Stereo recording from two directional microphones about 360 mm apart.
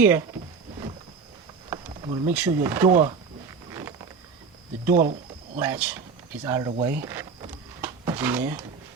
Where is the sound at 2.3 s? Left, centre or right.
Centre.